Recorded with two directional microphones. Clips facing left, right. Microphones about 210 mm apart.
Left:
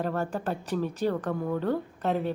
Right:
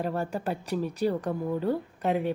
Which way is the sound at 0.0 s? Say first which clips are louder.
Even; 10° right (ahead or behind).